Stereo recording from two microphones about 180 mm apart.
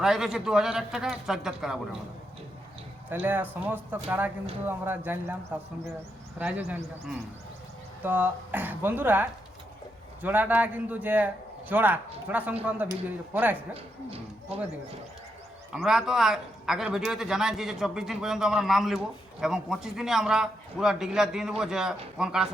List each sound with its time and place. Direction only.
0.0 s a man's voice: 5° right (ahead or behind)
3.1 s speech: 10° right (ahead or behind)
6.4 s speech: 10° right (ahead or behind)
8.0 s speech: 10° right (ahead or behind)
13.7 s speech: 35° right (ahead or behind)
15.7 s a man's voice: centre (ahead or behind)